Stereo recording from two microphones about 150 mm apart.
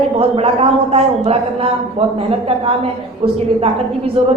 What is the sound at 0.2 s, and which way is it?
A man's voice, 40° right (ahead or behind).